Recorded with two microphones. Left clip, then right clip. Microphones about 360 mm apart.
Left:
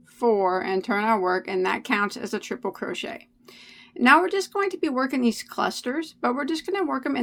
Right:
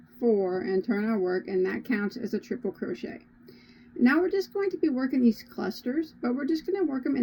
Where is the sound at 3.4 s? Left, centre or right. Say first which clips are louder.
Left 7 dB; centre.